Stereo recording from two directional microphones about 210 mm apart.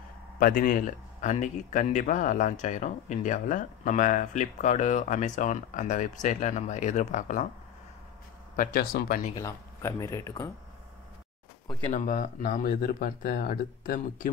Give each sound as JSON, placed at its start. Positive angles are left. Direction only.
{"t": 0.4, "sound": "speech", "side_deg": 40}
{"t": 8.5, "sound": "speech", "side_deg": 40}
{"t": 9.3, "sound": "speech", "side_deg": 15}
{"t": 11.9, "sound": "speech", "side_deg": 40}